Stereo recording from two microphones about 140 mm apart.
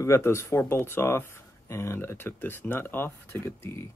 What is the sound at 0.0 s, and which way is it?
Speech, 20° left (ahead or behind).